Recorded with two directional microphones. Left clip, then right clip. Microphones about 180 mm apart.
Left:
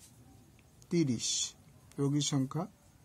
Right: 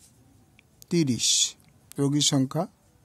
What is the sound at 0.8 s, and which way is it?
Speech, 65° right (ahead or behind).